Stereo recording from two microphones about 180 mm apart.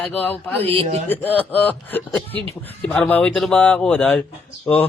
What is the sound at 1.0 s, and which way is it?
Speech, 10° left (ahead or behind).